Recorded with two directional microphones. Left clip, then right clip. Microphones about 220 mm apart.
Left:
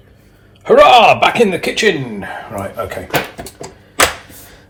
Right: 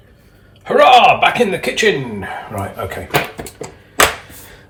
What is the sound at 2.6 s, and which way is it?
Speech, 15° left (ahead or behind).